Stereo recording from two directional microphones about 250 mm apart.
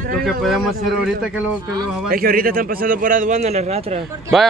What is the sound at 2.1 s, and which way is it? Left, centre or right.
A man's voice, right.